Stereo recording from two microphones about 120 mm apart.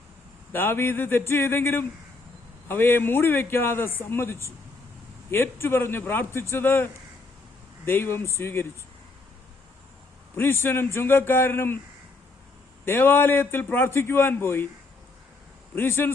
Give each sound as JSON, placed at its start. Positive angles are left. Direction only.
{"t": 0.5, "sound": "a man's voice", "side_deg": 20}
{"t": 10.3, "sound": "a man's voice", "side_deg": 20}
{"t": 12.8, "sound": "a man's voice", "side_deg": 20}
{"t": 15.7, "sound": "speech", "side_deg": 20}